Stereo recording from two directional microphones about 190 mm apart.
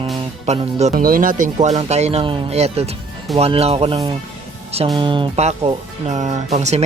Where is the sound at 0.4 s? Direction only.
35° right (ahead or behind).